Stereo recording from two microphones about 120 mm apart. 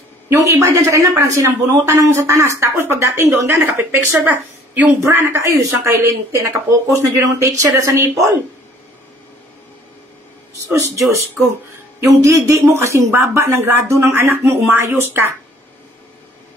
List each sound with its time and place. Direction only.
0.3 s speech: 25° right (ahead or behind)
10.6 s speech: 25° right (ahead or behind)